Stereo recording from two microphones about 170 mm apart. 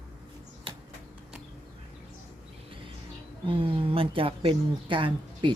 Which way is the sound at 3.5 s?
35° right (ahead or behind).